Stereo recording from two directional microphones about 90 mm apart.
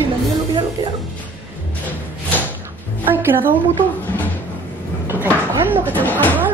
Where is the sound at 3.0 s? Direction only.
25° right (ahead or behind).